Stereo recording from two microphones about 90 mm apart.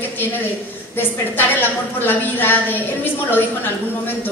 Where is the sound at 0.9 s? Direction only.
20° left (ahead or behind).